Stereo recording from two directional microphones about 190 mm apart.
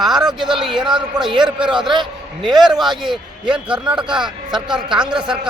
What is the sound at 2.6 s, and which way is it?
A man's voice, centre (ahead or behind).